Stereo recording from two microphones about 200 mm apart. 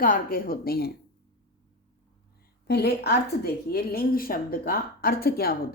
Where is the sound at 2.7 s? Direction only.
55° left (ahead or behind).